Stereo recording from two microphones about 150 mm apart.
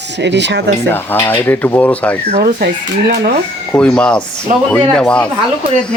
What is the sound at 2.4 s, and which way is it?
Speech, 90° right.